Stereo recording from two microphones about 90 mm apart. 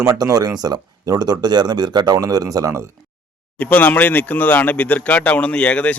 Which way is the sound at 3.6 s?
15° left (ahead or behind).